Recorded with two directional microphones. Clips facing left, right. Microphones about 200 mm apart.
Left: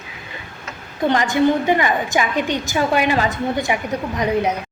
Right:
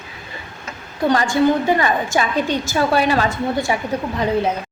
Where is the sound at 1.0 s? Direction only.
20° left (ahead or behind).